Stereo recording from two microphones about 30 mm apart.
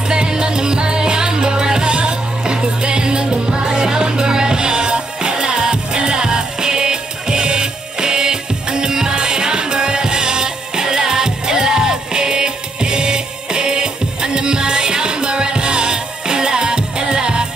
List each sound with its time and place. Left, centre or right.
0.1 s music: right